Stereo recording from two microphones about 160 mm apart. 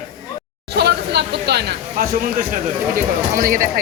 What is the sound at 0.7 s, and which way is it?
Speech, 90° right.